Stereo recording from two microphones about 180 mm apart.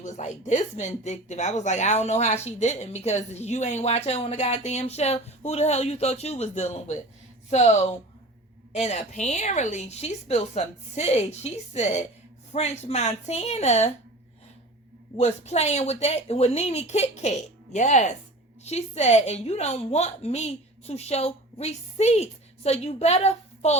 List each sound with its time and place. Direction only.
0.0 s speech: 40° left (ahead or behind)
15.2 s speech: 35° left (ahead or behind)